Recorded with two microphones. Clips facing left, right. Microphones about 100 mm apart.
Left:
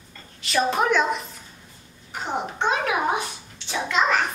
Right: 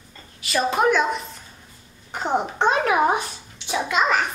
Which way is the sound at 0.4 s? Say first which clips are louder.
Right 1 dB; 5° right (ahead or behind).